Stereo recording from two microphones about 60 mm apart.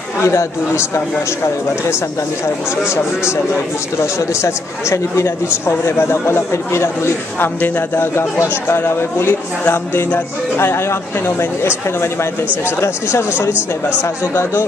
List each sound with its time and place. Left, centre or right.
0.2 s speech: left
4.3 s speech: left
13.5 s speech: right